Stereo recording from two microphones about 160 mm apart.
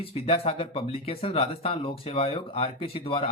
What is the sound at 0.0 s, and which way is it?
Speech, 35° left (ahead or behind).